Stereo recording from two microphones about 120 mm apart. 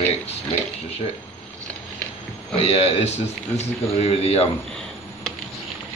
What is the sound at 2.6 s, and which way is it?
A man's voice, 60° left (ahead or behind).